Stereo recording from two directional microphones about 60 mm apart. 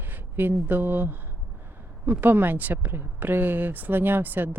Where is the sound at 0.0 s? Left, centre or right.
Right.